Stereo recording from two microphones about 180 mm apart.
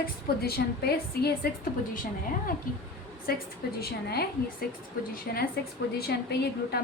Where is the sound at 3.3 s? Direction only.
55° left (ahead or behind).